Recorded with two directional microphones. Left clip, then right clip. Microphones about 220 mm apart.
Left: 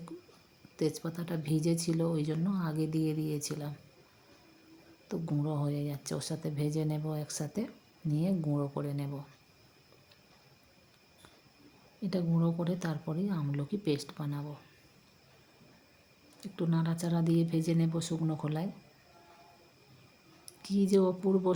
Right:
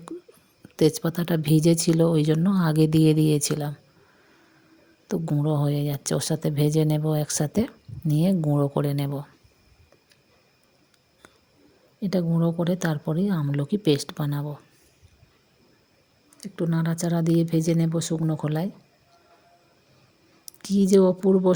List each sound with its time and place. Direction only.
0.8 s speech: 35° right (ahead or behind)
5.0 s speech: 30° right (ahead or behind)
12.0 s speech: 30° right (ahead or behind)
16.4 s speech: 25° right (ahead or behind)
20.4 s speech: 30° right (ahead or behind)